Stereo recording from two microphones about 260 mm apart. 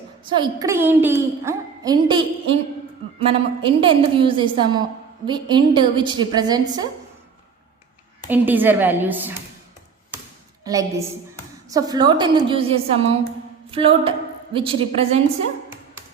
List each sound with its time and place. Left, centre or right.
0.3 s a woman's voice: centre
8.3 s a woman's voice: centre
10.6 s a woman's voice: centre
13.7 s a capella: right
14.5 s a woman's voice: right